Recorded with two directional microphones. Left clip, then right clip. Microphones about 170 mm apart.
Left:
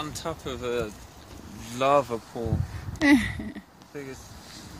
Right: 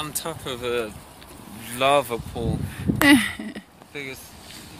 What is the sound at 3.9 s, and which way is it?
Speech, 65° left (ahead or behind).